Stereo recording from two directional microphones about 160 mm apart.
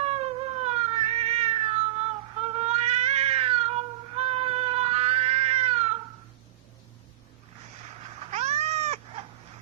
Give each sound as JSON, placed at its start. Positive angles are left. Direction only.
{"t": 0.0, "sound": "cat", "side_deg": -40}
{"t": 8.2, "sound": "cat", "side_deg": -45}